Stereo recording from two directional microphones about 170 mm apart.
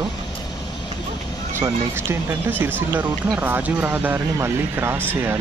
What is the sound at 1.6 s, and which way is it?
Speech, 15° right (ahead or behind).